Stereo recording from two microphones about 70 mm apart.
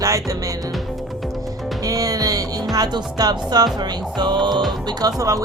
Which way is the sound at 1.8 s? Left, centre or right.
Right.